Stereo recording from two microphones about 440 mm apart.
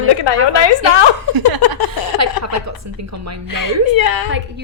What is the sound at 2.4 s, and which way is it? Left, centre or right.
Speech, right.